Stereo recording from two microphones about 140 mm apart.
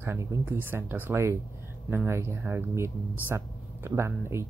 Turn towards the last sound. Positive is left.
turn(degrees=-20)  # may be behind; listen again after turning